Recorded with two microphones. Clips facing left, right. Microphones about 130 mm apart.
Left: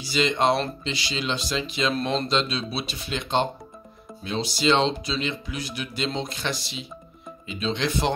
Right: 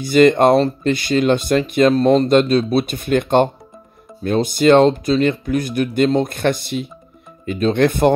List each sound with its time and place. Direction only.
0.0 s speech: 55° right (ahead or behind)